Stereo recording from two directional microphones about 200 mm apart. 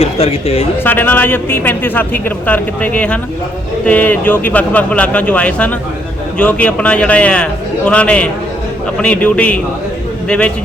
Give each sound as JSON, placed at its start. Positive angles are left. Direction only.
{"t": 0.0, "sound": "speech", "side_deg": 30}
{"t": 0.9, "sound": "a man's voice", "side_deg": 10}